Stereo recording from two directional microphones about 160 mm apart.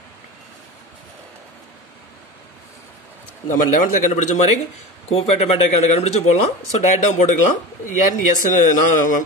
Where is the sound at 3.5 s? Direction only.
55° left (ahead or behind).